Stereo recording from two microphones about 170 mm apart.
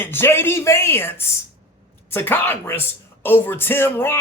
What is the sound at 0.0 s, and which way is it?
A woman's voice, 15° left (ahead or behind).